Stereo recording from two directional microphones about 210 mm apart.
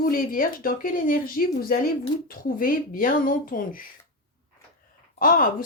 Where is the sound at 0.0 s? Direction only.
40° left (ahead or behind).